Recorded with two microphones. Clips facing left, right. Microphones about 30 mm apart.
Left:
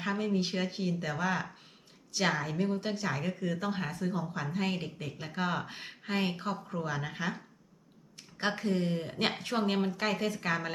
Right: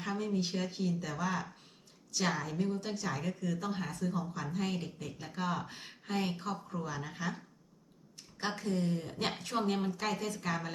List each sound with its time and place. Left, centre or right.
0.0 s a woman's voice: left